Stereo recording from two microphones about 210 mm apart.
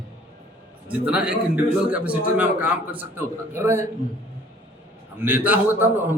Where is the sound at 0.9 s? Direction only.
5° right (ahead or behind).